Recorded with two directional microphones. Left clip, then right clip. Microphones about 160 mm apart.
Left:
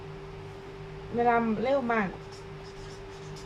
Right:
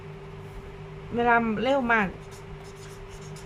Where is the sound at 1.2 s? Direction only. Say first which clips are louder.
Right 3 dB; 30° right (ahead or behind).